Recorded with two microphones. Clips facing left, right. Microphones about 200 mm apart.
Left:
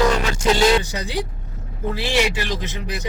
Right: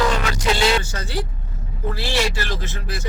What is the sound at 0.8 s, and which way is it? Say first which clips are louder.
A man's voice: left 2 dB; 15° left (ahead or behind).